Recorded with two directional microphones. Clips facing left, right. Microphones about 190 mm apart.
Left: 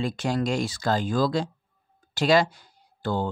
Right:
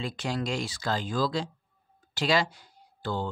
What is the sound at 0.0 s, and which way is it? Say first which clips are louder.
Speech: left 6 dB; 45° left (ahead or behind).